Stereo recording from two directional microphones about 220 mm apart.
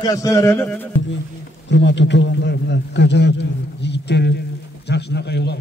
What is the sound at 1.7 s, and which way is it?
A man's voice, 55° left (ahead or behind).